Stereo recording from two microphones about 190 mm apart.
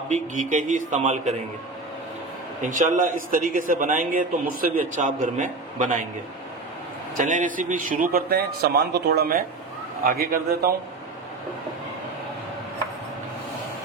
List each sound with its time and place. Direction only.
0.1 s speech: 40° right (ahead or behind)
2.6 s a man's voice: 40° right (ahead or behind)
7.2 s a man's voice: 45° right (ahead or behind)